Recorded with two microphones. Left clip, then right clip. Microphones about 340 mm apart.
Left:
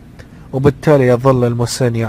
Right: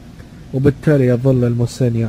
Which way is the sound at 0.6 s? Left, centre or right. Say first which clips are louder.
Left 4 dB; centre.